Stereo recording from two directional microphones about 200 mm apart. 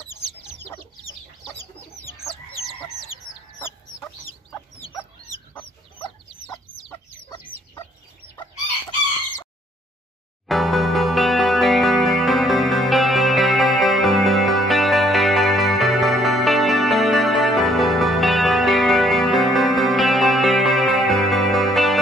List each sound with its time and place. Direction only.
3.1 s chicken: 30° left (ahead or behind)
3.5 s chicken: 10° left (ahead or behind)
6.9 s chicken: 15° left (ahead or behind)
10.5 s music: centre (ahead or behind)